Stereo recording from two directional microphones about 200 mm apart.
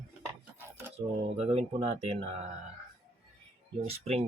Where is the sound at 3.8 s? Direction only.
30° right (ahead or behind).